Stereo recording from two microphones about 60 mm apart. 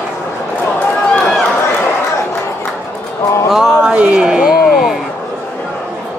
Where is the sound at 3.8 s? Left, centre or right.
Centre.